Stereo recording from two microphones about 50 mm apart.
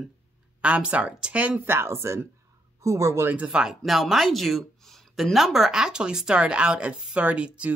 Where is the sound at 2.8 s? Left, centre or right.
Right.